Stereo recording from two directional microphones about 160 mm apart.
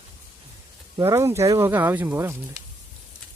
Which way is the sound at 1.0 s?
15° right (ahead or behind).